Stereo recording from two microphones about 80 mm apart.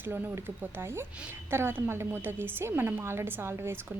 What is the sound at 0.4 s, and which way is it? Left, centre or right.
A woman's voice, right.